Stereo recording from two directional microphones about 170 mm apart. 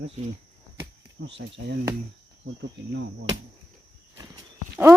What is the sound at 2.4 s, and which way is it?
Insect, 90° right.